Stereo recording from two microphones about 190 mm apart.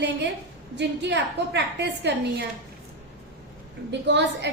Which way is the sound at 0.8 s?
65° right (ahead or behind).